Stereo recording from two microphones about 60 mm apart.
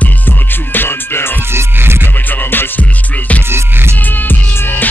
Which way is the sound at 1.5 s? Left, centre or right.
Right.